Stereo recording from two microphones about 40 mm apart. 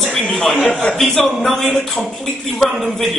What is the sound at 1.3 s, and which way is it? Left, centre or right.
Speech, centre.